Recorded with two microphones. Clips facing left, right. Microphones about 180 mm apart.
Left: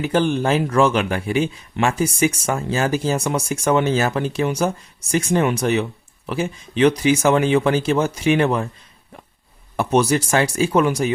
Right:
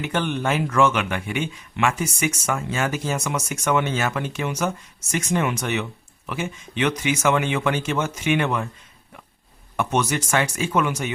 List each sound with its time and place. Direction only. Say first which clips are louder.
0.0 s speech: left 6 dB; 30° left (ahead or behind)
9.7 s speech: left 6 dB; 35° left (ahead or behind)